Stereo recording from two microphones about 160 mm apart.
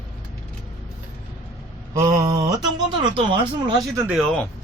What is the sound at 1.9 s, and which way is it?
Speech, 20° right (ahead or behind).